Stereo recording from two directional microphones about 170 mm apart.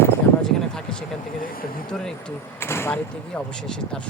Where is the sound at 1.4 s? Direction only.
55° left (ahead or behind).